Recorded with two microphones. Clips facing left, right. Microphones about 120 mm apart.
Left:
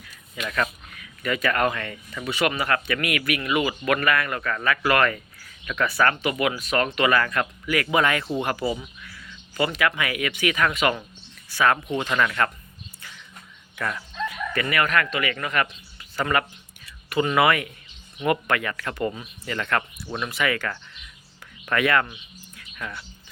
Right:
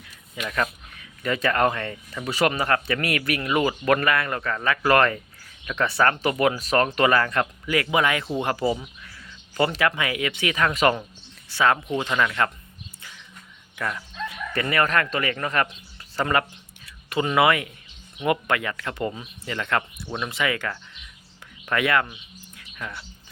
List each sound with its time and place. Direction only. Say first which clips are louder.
0.3 s speech: even; 5° right (ahead or behind)
0.9 s speech: right 1 dB; 25° right (ahead or behind)
2.3 s speech: right 2 dB; 35° right (ahead or behind); by 8.2 s 15° right (ahead or behind)
8.4 s speech: right 2 dB; 30° right (ahead or behind)
11.5 s speech: even; 25° right (ahead or behind)
13.7 s speech: even; 5° right (ahead or behind)
14.3 s speech: right 1 dB; 30° right (ahead or behind)
21.7 s bird: left 1 dB; 20° right (ahead or behind)